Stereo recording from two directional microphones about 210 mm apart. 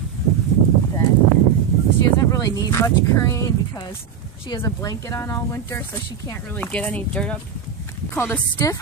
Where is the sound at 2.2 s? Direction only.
15° left (ahead or behind).